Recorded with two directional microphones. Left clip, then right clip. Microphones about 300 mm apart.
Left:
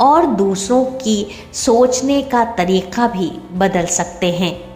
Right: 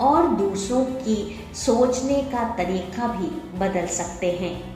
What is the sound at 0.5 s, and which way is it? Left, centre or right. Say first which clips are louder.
A woman's voice: left 8 dB; left.